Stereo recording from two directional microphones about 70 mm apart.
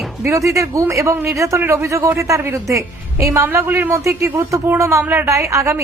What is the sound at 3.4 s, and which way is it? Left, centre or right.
A man's voice, right.